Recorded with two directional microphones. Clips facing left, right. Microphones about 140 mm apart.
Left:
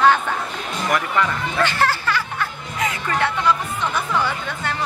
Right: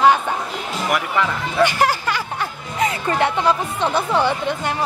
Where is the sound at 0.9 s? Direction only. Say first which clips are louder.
Even; 5° right (ahead or behind).